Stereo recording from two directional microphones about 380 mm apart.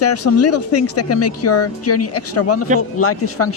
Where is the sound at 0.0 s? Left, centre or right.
Left.